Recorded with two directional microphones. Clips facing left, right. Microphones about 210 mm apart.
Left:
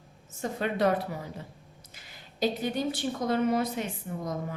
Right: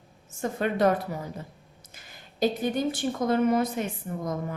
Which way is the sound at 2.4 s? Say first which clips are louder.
Right 3 dB; 50° right (ahead or behind).